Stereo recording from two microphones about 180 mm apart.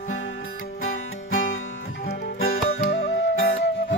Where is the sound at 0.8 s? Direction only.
90° left.